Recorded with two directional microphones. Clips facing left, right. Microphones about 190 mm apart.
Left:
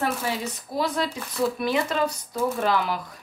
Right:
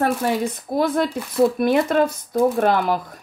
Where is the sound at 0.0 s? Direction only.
55° right (ahead or behind).